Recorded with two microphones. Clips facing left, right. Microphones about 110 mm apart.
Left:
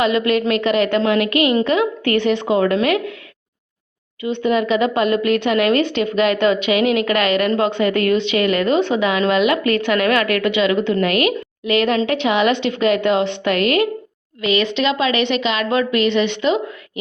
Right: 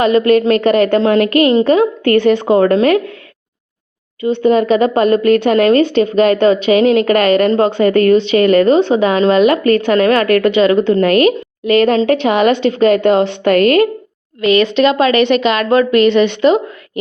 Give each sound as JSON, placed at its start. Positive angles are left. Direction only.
{"t": 0.0, "sound": "a woman's voice", "side_deg": -40}
{"t": 4.2, "sound": "a woman's voice", "side_deg": -40}